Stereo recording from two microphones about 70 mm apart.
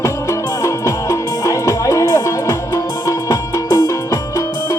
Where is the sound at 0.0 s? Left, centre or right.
Left.